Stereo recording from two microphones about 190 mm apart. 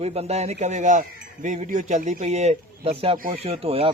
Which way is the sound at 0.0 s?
35° right (ahead or behind).